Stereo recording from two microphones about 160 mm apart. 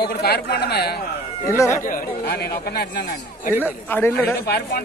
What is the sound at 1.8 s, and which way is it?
A man's voice, 60° left (ahead or behind).